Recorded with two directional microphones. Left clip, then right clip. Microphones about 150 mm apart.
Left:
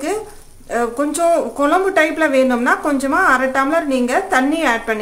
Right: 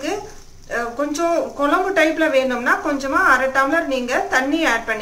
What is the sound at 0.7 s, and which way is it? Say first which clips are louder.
Speech: left 4 dB; 90° left.